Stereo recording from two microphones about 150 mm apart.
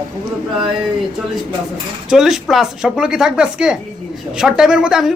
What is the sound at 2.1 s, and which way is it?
Speech, 5° right (ahead or behind).